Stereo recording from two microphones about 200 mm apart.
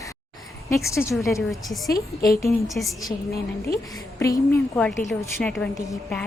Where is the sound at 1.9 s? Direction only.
50° left (ahead or behind).